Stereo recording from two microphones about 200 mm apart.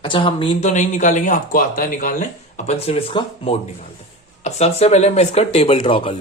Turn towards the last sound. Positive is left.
turn(degrees=25)  # may be behind; listen again after turning